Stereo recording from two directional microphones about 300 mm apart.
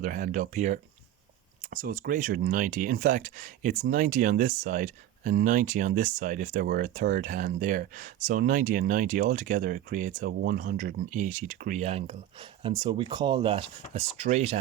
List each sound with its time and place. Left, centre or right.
0.0 s speech: right